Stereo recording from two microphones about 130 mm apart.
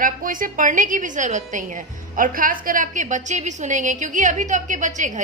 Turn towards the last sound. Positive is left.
turn(degrees=-70)  # may be behind; listen again after turning